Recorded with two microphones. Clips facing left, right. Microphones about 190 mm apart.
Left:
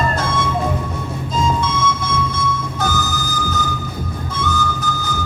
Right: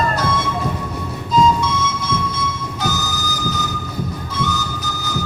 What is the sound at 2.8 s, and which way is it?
Music, 50° left (ahead or behind).